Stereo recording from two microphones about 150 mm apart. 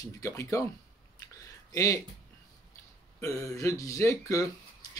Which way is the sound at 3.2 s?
20° left (ahead or behind).